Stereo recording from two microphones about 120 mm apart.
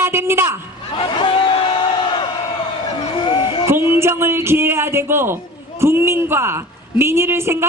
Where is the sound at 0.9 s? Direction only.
45° left (ahead or behind).